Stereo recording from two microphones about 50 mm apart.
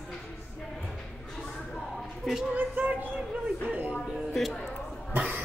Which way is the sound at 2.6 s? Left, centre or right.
Right.